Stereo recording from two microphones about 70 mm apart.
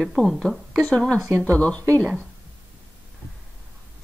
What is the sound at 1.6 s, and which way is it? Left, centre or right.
Speech, centre.